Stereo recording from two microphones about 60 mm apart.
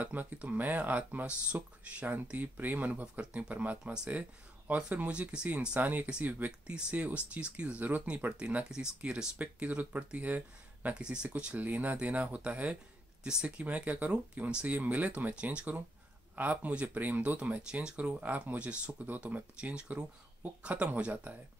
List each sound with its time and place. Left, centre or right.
0.0 s speech: right
5.8 s speech: right
6.0 s speech: centre
11.0 s speech: centre